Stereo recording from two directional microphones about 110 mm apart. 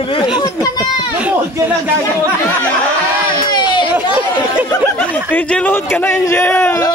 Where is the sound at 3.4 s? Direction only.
40° left (ahead or behind).